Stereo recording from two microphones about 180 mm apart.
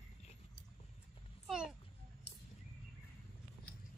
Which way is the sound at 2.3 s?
70° left (ahead or behind).